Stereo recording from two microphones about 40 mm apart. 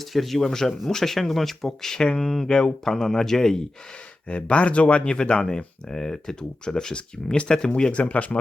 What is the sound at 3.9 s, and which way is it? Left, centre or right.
Speech, left.